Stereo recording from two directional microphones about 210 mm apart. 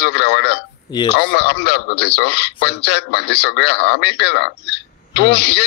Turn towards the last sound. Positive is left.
turn(degrees=50)  # may be behind; listen again after turning